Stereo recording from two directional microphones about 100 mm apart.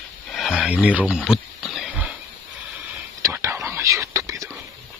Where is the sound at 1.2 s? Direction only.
5° right (ahead or behind).